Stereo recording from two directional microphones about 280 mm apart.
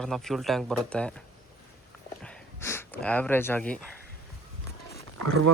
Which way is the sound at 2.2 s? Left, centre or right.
Centre.